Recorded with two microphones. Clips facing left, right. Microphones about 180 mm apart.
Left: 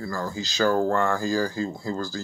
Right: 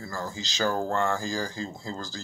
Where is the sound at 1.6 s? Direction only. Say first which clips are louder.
Left 7 dB; 55° left (ahead or behind).